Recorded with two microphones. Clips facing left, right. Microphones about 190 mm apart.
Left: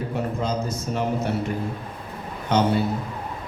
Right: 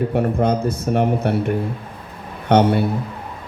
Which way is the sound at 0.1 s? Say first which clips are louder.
Right 8 dB; 60° right (ahead or behind).